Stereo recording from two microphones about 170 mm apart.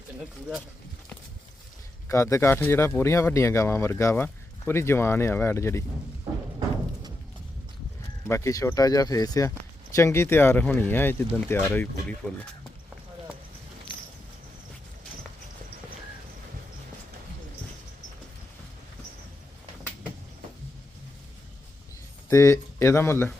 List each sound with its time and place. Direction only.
2.0 s speech: 20° left (ahead or behind)
8.3 s speech: 20° left (ahead or behind)
22.3 s speech: 15° left (ahead or behind)